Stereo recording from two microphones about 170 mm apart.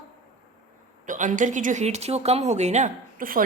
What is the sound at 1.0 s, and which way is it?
Speech, 50° right (ahead or behind).